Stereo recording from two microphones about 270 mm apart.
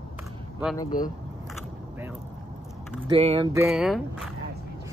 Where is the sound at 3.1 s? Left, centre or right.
Right.